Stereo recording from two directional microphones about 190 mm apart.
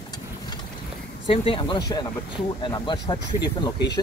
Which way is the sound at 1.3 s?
25° left (ahead or behind).